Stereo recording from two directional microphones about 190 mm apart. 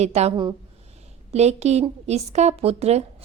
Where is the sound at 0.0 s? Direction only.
35° right (ahead or behind).